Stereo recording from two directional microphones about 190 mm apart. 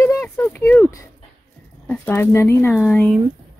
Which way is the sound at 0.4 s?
10° left (ahead or behind).